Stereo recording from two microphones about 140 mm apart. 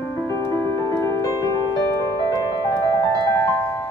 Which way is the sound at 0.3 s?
20° left (ahead or behind).